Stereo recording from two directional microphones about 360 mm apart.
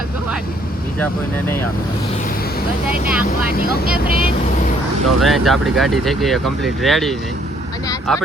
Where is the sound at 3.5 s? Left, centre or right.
Left.